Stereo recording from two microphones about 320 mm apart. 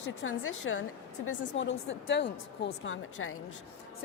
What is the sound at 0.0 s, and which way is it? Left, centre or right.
A woman's voice, left.